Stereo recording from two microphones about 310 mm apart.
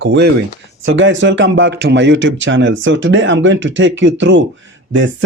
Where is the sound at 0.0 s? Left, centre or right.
Right.